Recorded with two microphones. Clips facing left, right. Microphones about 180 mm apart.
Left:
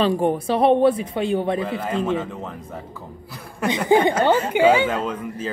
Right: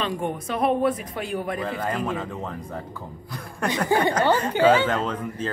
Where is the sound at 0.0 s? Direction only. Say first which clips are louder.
Left 8 dB; 35° left (ahead or behind).